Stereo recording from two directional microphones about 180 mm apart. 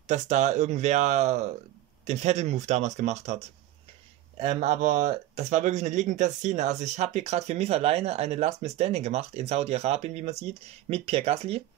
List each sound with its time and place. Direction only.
0.0 s speech: 40° right (ahead or behind)